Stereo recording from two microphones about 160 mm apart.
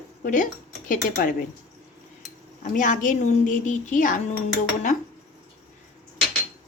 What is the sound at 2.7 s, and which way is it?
A woman's voice, 55° left (ahead or behind).